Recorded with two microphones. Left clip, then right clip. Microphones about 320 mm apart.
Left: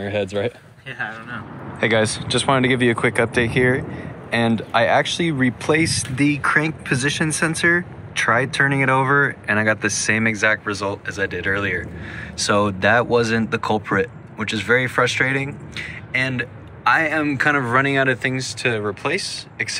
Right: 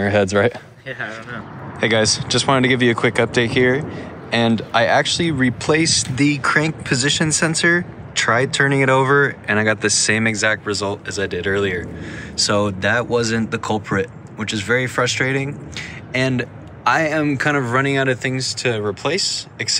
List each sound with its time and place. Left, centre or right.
0.0 s speech: right
0.8 s a man's voice: centre